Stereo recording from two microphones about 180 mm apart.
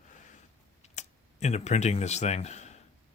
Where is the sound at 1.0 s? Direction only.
40° left (ahead or behind).